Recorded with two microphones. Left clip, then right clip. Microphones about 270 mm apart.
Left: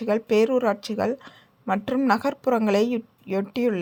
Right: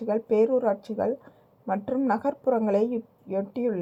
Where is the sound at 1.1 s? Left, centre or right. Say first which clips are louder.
Left 1 dB; left.